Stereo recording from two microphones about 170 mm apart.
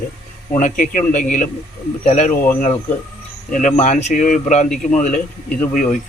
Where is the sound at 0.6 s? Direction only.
50° left (ahead or behind).